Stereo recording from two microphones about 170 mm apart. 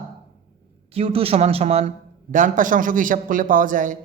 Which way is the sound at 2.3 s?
50° right (ahead or behind).